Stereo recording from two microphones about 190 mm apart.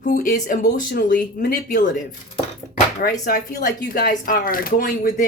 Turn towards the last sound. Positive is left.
turn(degrees=45)  # may be behind; listen again after turning